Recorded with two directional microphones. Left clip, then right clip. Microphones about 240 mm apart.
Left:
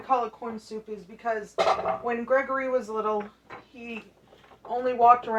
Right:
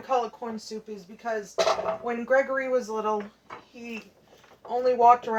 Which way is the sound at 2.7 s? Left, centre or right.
Centre.